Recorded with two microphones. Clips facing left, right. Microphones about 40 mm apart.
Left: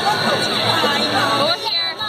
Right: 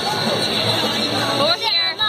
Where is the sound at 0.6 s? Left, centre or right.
Centre.